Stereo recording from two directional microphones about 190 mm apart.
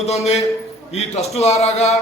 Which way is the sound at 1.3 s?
35° left (ahead or behind).